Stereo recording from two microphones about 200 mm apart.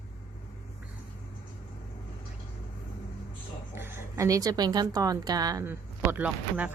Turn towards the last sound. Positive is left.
turn(degrees=-10)  # may be behind; listen again after turning